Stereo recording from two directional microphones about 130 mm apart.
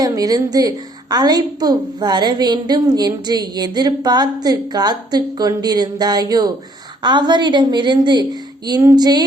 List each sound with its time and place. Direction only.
0.0 s a woman's voice: 30° right (ahead or behind)